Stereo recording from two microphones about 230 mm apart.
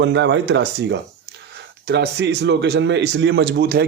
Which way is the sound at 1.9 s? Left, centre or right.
Right.